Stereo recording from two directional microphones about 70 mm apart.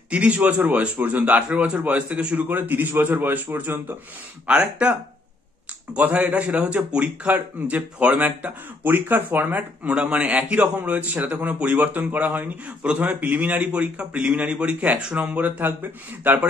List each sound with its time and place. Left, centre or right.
0.1 s speech: centre
4.5 s speech: centre
5.9 s speech: centre